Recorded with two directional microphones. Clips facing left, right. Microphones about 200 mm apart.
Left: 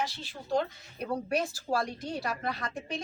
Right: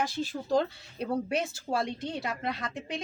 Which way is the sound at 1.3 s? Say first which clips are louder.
Even; 25° right (ahead or behind).